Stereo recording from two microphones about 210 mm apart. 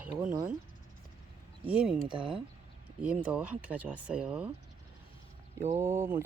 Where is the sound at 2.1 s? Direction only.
25° right (ahead or behind).